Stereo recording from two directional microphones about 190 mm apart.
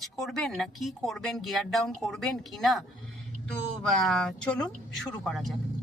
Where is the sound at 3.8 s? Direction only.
Centre (ahead or behind).